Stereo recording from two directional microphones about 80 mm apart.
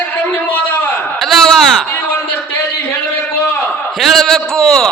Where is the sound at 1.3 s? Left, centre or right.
Centre.